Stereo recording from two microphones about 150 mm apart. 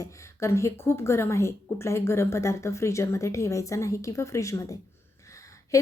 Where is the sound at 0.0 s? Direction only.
20° left (ahead or behind).